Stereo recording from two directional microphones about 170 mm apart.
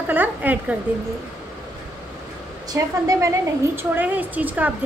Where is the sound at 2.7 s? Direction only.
20° right (ahead or behind).